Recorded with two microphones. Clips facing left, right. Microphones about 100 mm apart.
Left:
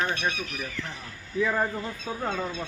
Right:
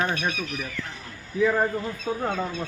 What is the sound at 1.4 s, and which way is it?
Speech, 10° right (ahead or behind).